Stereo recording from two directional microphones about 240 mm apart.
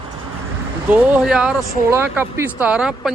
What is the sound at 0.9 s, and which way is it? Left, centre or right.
Speech, centre.